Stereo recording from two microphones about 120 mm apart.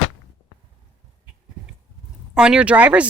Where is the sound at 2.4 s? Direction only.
10° right (ahead or behind).